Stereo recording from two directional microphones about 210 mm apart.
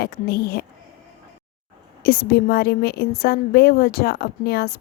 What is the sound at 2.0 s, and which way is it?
A woman's voice, 45° left (ahead or behind).